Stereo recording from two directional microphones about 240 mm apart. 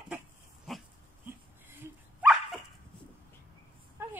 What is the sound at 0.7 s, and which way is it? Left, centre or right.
Dog, centre.